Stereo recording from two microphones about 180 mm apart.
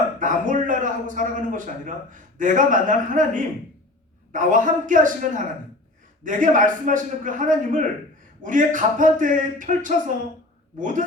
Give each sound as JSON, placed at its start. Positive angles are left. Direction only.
{"t": 0.2, "sound": "a man's voice", "side_deg": -45}